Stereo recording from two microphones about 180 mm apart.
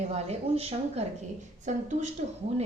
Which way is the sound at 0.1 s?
35° right (ahead or behind).